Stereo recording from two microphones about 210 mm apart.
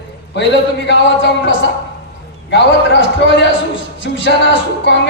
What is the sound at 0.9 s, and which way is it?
Music, 55° left (ahead or behind).